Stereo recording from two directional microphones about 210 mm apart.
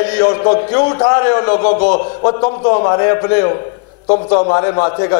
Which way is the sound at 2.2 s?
30° left (ahead or behind).